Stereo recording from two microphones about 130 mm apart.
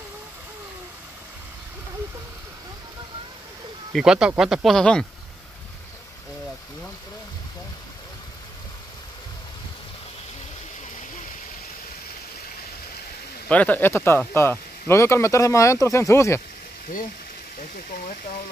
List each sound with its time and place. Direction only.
3.9 s speech: 5° right (ahead or behind)
13.5 s speech: 10° left (ahead or behind)
17.6 s speech: 80° left